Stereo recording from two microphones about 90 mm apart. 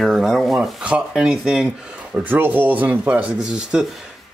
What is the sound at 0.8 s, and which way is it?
Speech, 10° right (ahead or behind).